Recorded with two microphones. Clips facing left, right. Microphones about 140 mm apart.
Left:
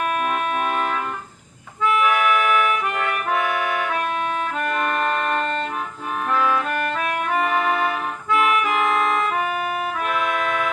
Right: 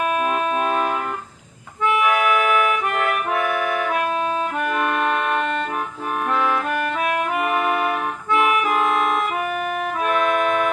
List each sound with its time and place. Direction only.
0.2 s organ: 5° right (ahead or behind)
0.6 s organ: 20° right (ahead or behind)
2.0 s music: 35° right (ahead or behind)
4.6 s music: 10° right (ahead or behind)